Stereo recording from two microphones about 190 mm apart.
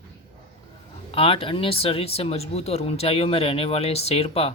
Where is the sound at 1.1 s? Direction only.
30° left (ahead or behind).